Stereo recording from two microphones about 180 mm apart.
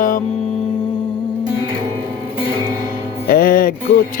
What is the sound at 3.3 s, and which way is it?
Music, 55° left (ahead or behind).